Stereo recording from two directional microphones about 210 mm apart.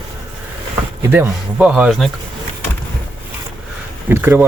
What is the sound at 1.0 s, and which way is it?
Speech, 10° right (ahead or behind).